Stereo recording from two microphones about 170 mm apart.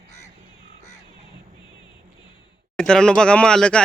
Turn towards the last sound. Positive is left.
turn(degrees=5)  # may be behind; listen again after turning